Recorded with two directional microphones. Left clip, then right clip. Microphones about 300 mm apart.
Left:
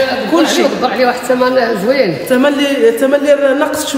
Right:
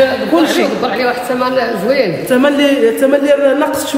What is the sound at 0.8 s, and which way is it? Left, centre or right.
Speech, left.